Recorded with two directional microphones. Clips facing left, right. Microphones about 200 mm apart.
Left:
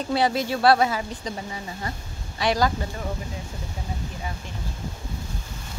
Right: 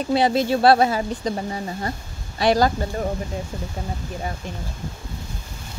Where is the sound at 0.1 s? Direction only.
25° right (ahead or behind).